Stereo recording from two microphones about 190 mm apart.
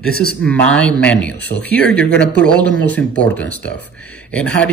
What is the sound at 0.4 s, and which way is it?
Speech, 5° left (ahead or behind).